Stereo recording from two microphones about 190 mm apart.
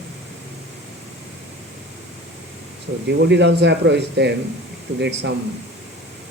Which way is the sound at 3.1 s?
65° right (ahead or behind).